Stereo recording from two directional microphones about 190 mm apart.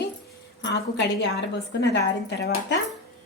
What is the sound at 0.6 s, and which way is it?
Speech, 65° left (ahead or behind).